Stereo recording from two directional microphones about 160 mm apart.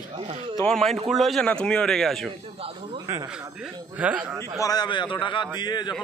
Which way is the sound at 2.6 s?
35° right (ahead or behind).